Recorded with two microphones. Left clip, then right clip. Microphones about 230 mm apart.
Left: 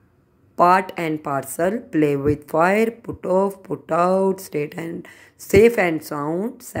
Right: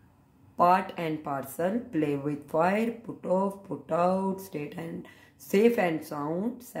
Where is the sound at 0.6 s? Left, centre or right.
Left.